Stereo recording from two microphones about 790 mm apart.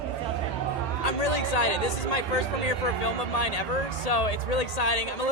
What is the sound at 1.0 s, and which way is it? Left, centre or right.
Speech, left.